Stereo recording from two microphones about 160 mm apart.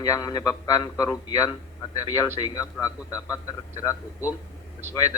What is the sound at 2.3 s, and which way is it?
Speech, 20° left (ahead or behind).